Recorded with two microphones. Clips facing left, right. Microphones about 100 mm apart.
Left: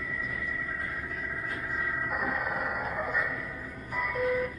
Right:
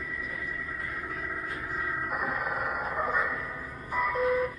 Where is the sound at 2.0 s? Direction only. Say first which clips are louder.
Even; 25° right (ahead or behind).